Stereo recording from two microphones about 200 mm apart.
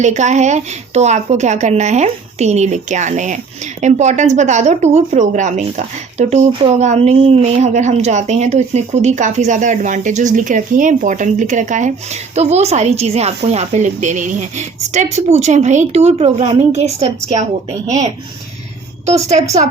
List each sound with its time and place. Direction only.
0.0 s a woman's voice: 35° right (ahead or behind)
19.3 s a woman's voice: 35° right (ahead or behind)